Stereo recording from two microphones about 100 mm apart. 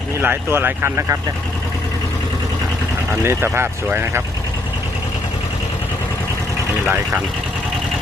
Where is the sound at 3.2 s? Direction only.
25° right (ahead or behind).